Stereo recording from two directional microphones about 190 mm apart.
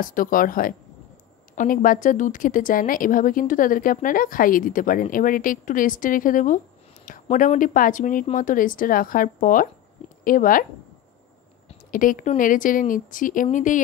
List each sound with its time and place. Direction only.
0.0 s a woman's voice: 45° left (ahead or behind)
11.9 s a woman's voice: 45° left (ahead or behind)